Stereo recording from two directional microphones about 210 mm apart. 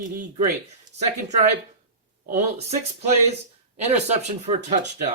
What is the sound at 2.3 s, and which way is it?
Speech, 30° right (ahead or behind).